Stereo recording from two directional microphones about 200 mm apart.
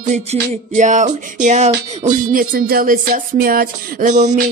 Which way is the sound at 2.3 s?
45° right (ahead or behind).